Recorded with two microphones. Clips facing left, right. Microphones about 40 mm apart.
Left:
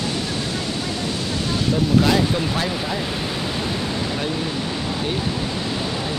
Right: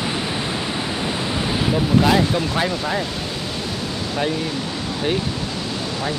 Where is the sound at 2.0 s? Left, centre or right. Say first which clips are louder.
Right 1 dB; centre.